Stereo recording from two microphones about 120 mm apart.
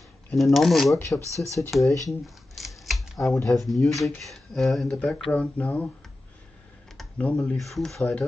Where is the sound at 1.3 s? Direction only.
25° left (ahead or behind).